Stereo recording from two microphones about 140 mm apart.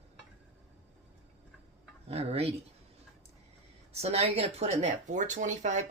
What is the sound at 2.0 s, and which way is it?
Speech, 45° right (ahead or behind).